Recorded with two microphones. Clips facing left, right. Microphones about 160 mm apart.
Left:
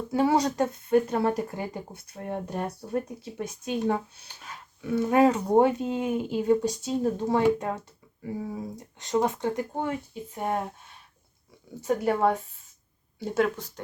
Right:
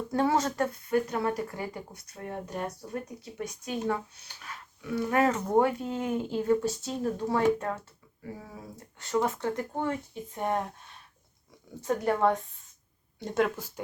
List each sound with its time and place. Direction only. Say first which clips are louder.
0.1 s speech: left 3 dB; 10° left (ahead or behind)
11.8 s speech: left 2 dB; 5° left (ahead or behind)